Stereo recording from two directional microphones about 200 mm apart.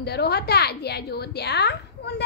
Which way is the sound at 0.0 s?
55° left (ahead or behind).